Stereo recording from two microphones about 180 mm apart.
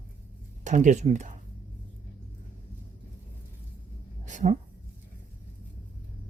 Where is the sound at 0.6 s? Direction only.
45° right (ahead or behind).